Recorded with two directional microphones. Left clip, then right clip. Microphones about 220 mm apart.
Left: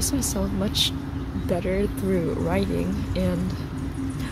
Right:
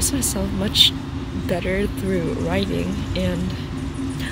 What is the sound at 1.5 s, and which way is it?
Speech, 5° left (ahead or behind).